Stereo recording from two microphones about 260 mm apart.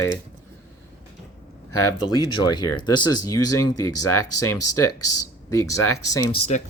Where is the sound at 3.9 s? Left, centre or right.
Left.